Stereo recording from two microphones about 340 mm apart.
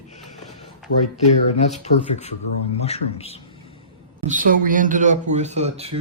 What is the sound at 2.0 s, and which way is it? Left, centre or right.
Speech, centre.